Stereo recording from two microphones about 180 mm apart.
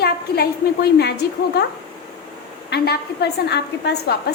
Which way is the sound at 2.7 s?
65° left (ahead or behind).